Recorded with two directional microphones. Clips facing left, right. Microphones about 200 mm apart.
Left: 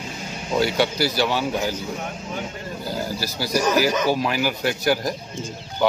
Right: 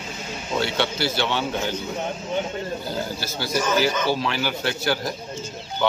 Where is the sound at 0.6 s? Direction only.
5° left (ahead or behind).